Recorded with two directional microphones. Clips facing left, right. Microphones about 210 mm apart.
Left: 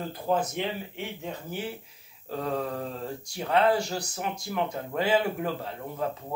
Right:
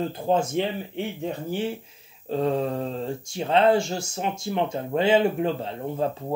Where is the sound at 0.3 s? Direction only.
25° right (ahead or behind).